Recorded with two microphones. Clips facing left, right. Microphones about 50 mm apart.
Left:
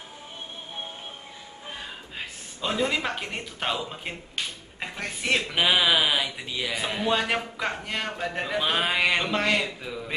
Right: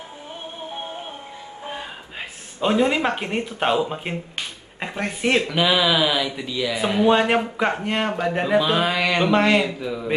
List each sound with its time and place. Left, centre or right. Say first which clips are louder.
1.7 s speech: right 4 dB; centre
5.5 s speech: right 3 dB; centre
6.8 s a man's voice: right 9 dB; centre
8.6 s speech: right 3 dB; centre
9.2 s a man's voice: right 7 dB; centre